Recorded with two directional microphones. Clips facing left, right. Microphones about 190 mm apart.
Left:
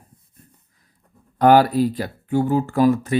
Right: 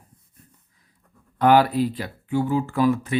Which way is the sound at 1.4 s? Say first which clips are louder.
Left 3 dB; 40° left (ahead or behind).